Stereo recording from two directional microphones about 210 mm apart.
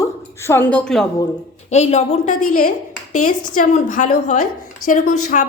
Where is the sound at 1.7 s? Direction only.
30° left (ahead or behind).